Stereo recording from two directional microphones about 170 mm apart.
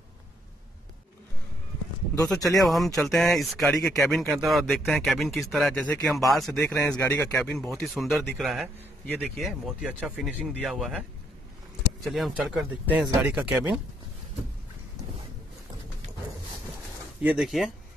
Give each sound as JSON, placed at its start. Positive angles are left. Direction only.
{"t": 2.6, "sound": "speech", "side_deg": 0}
{"t": 7.5, "sound": "speech", "side_deg": 0}
{"t": 17.2, "sound": "speech", "side_deg": -5}